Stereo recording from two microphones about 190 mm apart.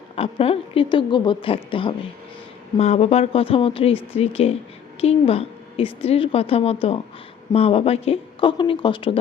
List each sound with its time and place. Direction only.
0.2 s a woman's voice: 30° left (ahead or behind)